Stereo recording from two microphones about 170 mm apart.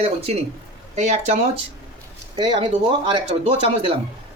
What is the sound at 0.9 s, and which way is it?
Speech, 40° right (ahead or behind).